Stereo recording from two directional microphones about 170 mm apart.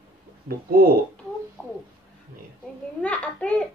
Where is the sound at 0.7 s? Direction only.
60° right (ahead or behind).